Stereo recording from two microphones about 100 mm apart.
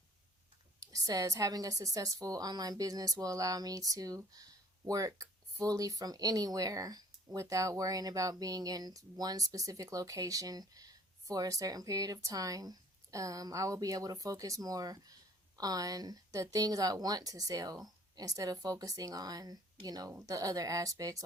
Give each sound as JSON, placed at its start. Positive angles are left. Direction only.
{"t": 0.8, "sound": "speech", "side_deg": -35}